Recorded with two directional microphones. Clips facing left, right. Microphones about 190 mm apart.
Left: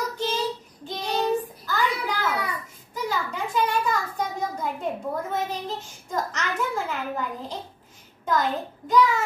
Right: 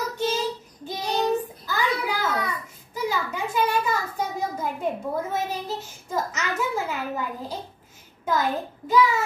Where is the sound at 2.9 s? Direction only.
10° right (ahead or behind).